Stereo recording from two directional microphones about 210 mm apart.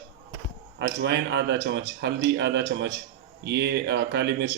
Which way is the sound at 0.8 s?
55° right (ahead or behind).